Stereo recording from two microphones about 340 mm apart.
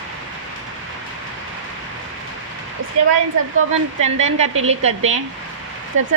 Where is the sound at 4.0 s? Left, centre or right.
Centre.